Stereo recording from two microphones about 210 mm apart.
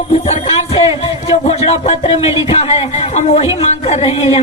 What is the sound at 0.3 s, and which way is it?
Speech, 30° left (ahead or behind).